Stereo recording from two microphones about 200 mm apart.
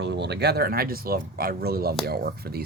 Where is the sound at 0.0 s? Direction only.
60° right (ahead or behind).